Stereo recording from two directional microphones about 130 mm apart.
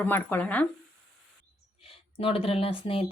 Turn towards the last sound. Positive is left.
turn(degrees=45)  # may be behind; listen again after turning